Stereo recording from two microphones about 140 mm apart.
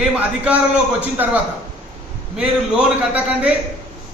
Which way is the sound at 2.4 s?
10° right (ahead or behind).